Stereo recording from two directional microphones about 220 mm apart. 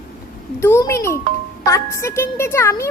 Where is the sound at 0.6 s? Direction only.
10° left (ahead or behind).